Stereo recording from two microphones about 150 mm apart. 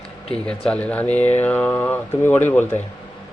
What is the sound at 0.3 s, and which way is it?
Speech, 5° left (ahead or behind).